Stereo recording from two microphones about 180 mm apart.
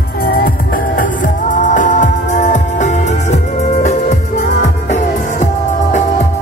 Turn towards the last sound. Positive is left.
turn(degrees=40)  # may be behind; listen again after turning